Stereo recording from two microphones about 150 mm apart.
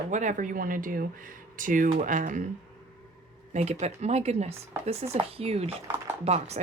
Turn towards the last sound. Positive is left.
turn(degrees=-45)  # may be behind; listen again after turning